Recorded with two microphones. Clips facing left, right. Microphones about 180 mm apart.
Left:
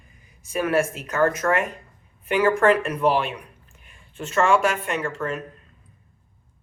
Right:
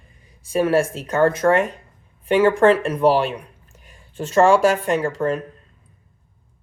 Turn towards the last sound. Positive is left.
turn(degrees=-35)  # may be behind; listen again after turning